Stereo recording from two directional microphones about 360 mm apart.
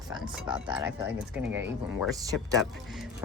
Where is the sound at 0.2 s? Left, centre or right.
Centre.